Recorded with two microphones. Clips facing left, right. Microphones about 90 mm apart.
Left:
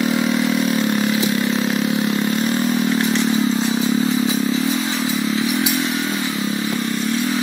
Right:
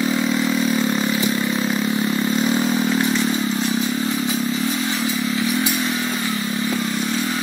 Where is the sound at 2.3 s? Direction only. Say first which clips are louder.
Even; 5° right (ahead or behind).